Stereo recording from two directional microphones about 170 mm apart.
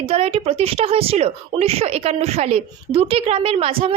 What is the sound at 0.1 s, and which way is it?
Speech, 35° right (ahead or behind).